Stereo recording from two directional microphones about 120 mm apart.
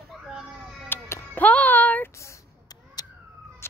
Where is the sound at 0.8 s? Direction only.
20° left (ahead or behind).